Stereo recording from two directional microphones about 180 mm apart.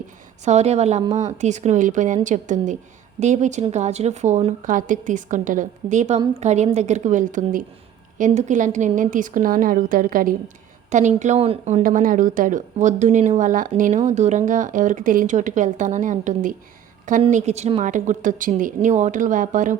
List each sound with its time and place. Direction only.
0.4 s a woman's voice: 35° right (ahead or behind)